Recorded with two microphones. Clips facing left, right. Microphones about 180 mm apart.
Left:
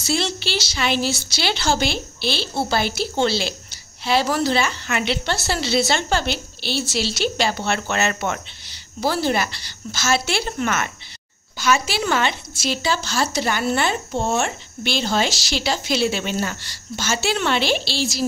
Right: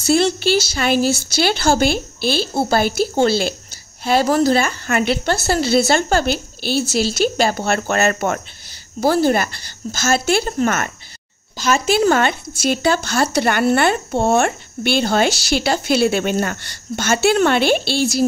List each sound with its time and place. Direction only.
0.0 s a woman's voice: 50° right (ahead or behind)